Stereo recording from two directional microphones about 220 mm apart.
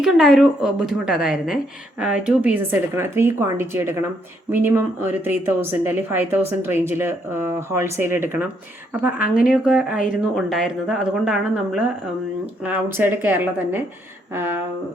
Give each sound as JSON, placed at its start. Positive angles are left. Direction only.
{"t": 0.0, "sound": "speech", "side_deg": 0}